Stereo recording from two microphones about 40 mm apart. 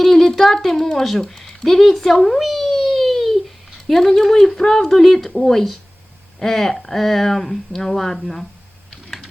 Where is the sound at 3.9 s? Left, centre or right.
Centre.